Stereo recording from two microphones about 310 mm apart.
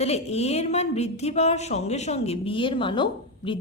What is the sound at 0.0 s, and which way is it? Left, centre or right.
Speech, centre.